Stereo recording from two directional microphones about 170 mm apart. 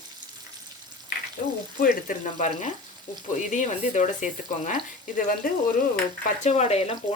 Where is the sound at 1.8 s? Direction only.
50° left (ahead or behind).